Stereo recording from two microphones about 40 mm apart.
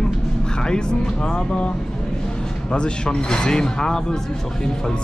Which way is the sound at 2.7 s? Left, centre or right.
Left.